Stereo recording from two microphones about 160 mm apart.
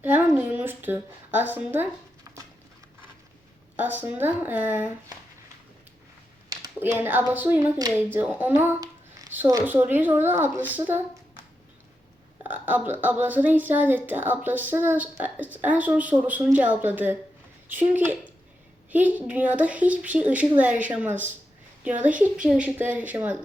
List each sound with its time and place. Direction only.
0.0 s speech: 10° right (ahead or behind)
3.8 s a woman's voice: 10° right (ahead or behind)
6.5 s a sound: 20° right (ahead or behind)
6.9 s a woman's voice: 15° right (ahead or behind)
12.4 s a woman's voice: 10° right (ahead or behind)